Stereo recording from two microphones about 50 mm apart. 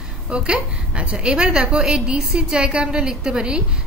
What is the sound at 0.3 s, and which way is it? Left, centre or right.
A woman's voice, right.